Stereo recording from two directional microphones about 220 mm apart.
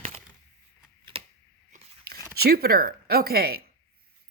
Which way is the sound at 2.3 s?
45° right (ahead or behind).